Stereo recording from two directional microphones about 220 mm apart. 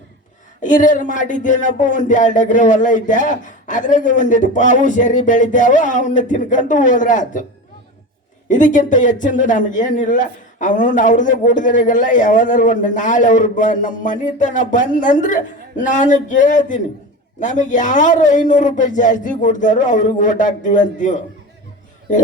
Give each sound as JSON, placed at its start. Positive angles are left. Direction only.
{"t": 0.6, "sound": "speech", "side_deg": 35}
{"t": 8.4, "sound": "speech", "side_deg": 35}